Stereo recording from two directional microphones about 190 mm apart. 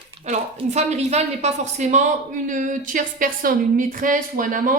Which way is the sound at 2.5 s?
45° right (ahead or behind).